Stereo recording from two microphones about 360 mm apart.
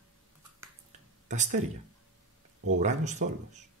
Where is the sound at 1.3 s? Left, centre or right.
Centre.